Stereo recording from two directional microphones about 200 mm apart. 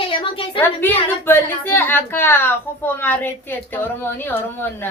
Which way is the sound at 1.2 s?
10° left (ahead or behind).